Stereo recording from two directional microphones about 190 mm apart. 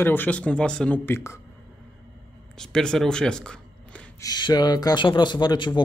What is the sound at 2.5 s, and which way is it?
Speech, 5° left (ahead or behind).